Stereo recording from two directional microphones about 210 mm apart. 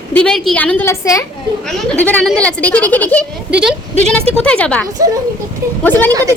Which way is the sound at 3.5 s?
5° right (ahead or behind).